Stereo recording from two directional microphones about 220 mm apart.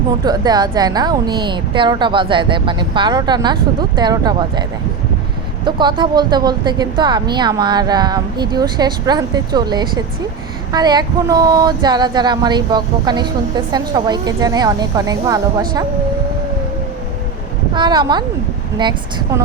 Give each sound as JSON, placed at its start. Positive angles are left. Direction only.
{"t": 0.3, "sound": "speech", "side_deg": -20}
{"t": 5.6, "sound": "speech", "side_deg": -20}
{"t": 17.7, "sound": "speech", "side_deg": -20}